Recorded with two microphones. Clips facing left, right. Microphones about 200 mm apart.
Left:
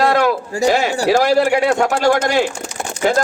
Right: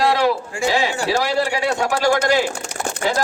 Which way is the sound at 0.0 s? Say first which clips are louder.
Left 3 dB; 50° left (ahead or behind).